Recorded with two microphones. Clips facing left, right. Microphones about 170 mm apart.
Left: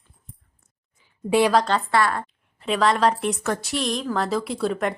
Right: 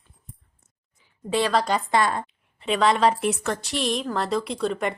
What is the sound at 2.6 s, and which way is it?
A woman's voice, centre (ahead or behind).